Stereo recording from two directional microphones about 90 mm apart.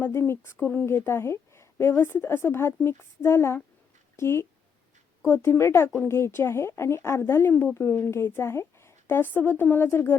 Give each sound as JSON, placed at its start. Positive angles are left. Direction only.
{"t": 0.0, "sound": "speech", "side_deg": 25}